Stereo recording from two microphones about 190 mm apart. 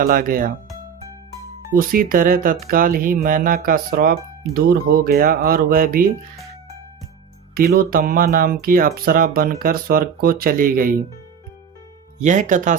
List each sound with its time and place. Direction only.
0.0 s speech: 50° right (ahead or behind)
1.7 s speech: 50° right (ahead or behind)
7.8 s speech: 50° right (ahead or behind)
12.2 s speech: 40° right (ahead or behind)